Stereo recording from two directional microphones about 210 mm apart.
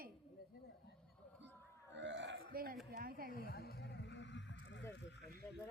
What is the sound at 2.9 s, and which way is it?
Speech, 45° right (ahead or behind).